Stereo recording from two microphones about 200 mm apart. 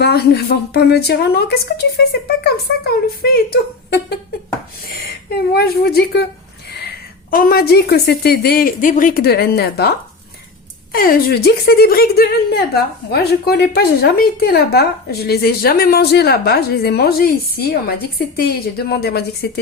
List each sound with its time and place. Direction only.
0.0 s a woman's voice: 55° left (ahead or behind)
10.9 s a woman's voice: 50° left (ahead or behind)